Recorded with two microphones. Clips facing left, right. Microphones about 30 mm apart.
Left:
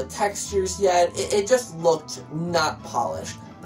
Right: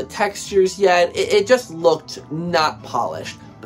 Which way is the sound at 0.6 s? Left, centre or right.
Right.